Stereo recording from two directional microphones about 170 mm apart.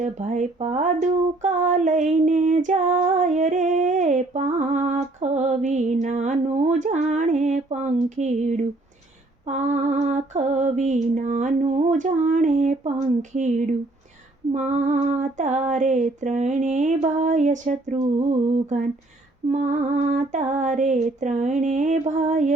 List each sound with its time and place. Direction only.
0.0 s female singing: 45° right (ahead or behind)